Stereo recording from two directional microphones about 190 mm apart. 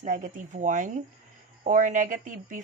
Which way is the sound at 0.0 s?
45° right (ahead or behind).